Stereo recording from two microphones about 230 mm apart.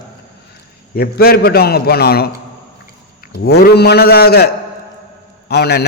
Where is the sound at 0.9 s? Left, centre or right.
Left.